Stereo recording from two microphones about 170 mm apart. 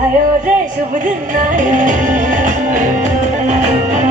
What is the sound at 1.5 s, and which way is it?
Music, 50° right (ahead or behind).